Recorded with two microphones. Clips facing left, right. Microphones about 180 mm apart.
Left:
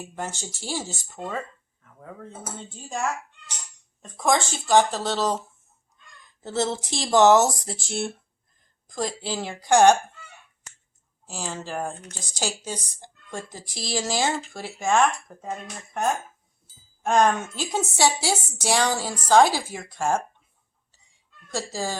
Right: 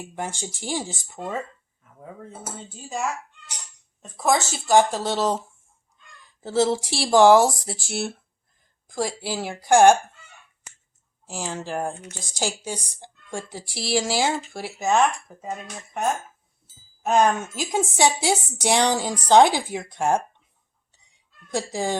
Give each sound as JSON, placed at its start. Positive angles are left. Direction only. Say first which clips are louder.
{"t": 0.2, "sound": "a woman's voice", "louder": "right 2 dB", "side_deg": -15}
{"t": 6.4, "sound": "a woman's voice", "louder": "right 5 dB", "side_deg": -10}
{"t": 11.3, "sound": "a woman's voice", "louder": "right 2 dB", "side_deg": -15}
{"t": 17.0, "sound": "a woman's voice", "louder": "right 1 dB", "side_deg": -5}
{"t": 21.5, "sound": "a woman's voice", "louder": "right 3 dB", "side_deg": -15}